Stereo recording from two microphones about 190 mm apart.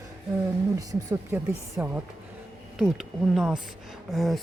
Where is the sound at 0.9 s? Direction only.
20° right (ahead or behind).